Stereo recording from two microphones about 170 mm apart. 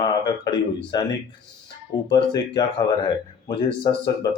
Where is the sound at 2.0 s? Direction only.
25° left (ahead or behind).